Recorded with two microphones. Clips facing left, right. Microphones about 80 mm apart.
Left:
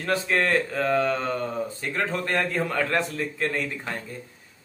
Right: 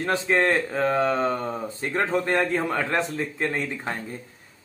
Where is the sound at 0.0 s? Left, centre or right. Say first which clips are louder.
Right 2 dB; right.